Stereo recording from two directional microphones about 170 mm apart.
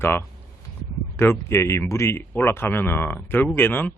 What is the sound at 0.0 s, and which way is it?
Speech, 15° left (ahead or behind).